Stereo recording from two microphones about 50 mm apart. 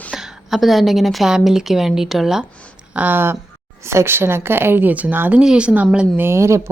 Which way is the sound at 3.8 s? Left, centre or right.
Right.